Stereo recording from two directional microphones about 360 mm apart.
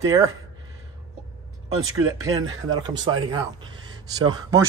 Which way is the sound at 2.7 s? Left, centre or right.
Centre.